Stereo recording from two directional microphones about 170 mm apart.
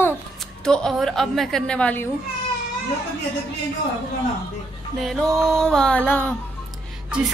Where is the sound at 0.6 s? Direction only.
5° left (ahead or behind).